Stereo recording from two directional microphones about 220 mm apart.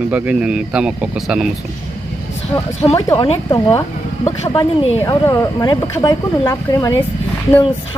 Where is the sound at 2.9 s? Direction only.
20° left (ahead or behind).